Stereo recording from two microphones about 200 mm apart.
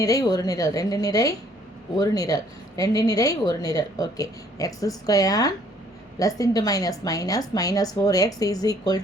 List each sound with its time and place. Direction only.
0.0 s speech: 15° left (ahead or behind)